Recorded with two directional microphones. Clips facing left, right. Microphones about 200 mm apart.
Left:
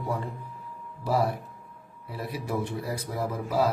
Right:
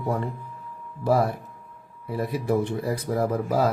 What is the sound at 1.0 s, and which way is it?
Speech, 55° right (ahead or behind).